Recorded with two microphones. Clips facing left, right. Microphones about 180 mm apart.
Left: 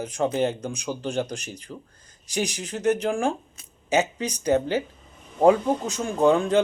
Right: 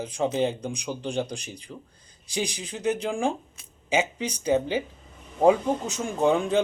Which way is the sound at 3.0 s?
15° right (ahead or behind).